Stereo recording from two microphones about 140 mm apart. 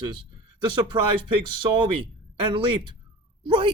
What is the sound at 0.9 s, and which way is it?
Speech, 35° right (ahead or behind).